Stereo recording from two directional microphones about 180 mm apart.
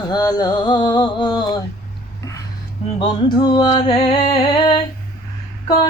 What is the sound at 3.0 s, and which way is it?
Music, 25° left (ahead or behind).